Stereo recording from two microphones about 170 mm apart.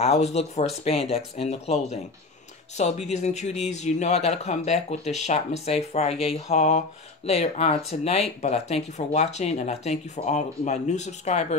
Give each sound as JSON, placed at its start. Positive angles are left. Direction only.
{"t": 0.0, "sound": "speech", "side_deg": 40}